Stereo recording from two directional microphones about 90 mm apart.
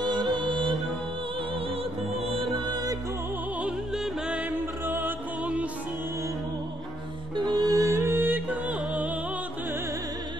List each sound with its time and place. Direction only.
0.0 s music: 55° right (ahead or behind)
2.6 s music: 45° right (ahead or behind)
3.9 s music: 5° right (ahead or behind)
4.5 s music: 25° right (ahead or behind)
7.3 s music: 50° right (ahead or behind); by 9.1 s 15° right (ahead or behind)